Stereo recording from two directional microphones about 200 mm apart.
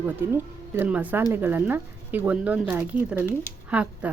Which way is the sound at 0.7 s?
10° right (ahead or behind).